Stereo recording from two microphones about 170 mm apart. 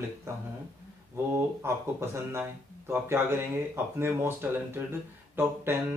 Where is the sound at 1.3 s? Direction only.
15° right (ahead or behind).